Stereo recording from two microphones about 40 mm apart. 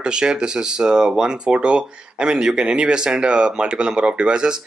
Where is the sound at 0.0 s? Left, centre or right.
Right.